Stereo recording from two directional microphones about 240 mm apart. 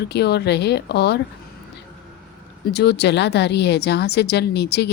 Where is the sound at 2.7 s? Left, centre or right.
Left.